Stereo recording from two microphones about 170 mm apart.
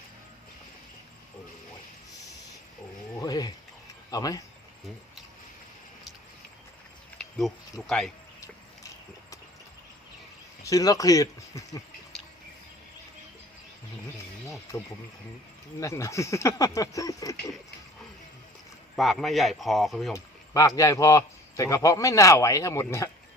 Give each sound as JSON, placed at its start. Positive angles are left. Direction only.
{"t": 3.2, "sound": "a sound", "side_deg": 20}
{"t": 4.1, "sound": "speech", "side_deg": 20}
{"t": 7.2, "sound": "speech", "side_deg": 0}
{"t": 10.6, "sound": "speech", "side_deg": 20}
{"t": 14.7, "sound": "speech", "side_deg": 20}
{"t": 18.9, "sound": "speech", "side_deg": 0}
{"t": 20.1, "sound": "speech", "side_deg": 20}